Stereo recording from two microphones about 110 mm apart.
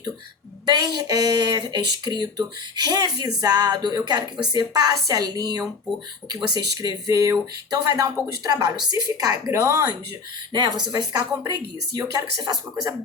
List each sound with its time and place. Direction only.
0.6 s speech: 40° right (ahead or behind)
10.5 s speech: 40° right (ahead or behind)